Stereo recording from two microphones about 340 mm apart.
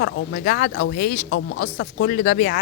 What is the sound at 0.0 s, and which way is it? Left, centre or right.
Speech, left.